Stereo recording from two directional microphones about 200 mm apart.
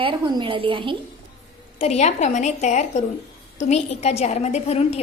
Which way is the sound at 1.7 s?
35° left (ahead or behind).